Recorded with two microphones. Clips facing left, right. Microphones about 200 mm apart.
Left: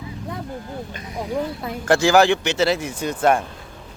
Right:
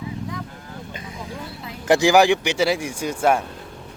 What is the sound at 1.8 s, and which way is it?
Speech, 15° right (ahead or behind).